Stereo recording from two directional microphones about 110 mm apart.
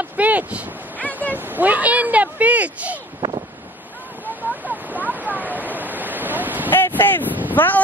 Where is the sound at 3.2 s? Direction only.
40° right (ahead or behind).